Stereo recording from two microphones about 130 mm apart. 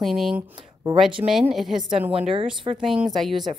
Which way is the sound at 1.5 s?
Centre (ahead or behind).